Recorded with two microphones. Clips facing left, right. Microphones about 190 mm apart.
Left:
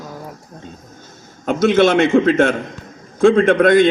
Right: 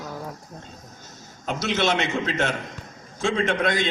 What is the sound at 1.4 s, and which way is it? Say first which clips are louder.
A man's voice: left 11 dB; 50° left (ahead or behind).